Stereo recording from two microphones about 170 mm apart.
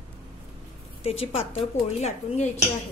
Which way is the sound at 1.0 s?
35° left (ahead or behind).